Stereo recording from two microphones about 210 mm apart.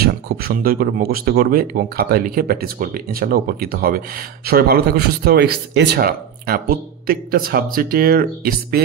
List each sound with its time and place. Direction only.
0.0 s speech: 45° right (ahead or behind)